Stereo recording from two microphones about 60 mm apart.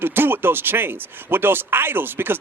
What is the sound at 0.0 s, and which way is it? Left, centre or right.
Speech, right.